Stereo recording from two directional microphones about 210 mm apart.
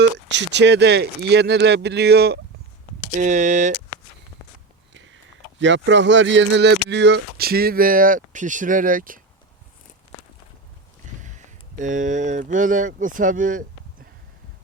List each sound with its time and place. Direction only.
0.0 s speech: 55° right (ahead or behind)
3.2 s speech: 35° right (ahead or behind)
4.9 s speech: 60° right (ahead or behind); by 9.2 s 40° right (ahead or behind)
11.2 s speech: 35° right (ahead or behind)